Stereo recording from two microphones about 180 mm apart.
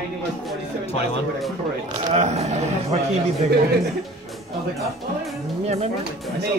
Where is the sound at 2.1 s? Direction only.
40° right (ahead or behind).